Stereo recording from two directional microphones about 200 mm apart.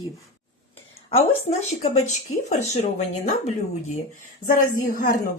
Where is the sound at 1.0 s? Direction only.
30° left (ahead or behind).